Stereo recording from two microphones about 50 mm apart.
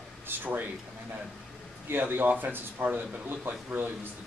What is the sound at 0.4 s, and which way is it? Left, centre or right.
Speech, right.